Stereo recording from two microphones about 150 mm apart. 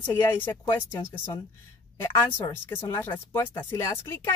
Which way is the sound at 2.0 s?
15° left (ahead or behind).